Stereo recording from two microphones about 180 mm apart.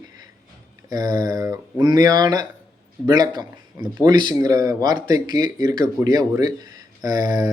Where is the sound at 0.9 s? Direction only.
20° right (ahead or behind).